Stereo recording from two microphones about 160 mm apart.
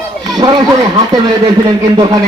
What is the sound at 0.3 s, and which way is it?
Speech, 25° right (ahead or behind).